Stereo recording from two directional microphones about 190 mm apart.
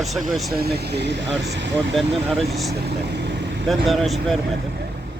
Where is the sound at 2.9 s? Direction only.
65° right (ahead or behind).